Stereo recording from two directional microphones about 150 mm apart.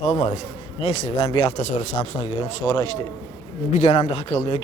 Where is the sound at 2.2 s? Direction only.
30° left (ahead or behind).